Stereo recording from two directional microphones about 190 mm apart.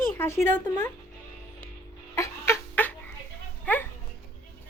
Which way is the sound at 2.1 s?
15° left (ahead or behind).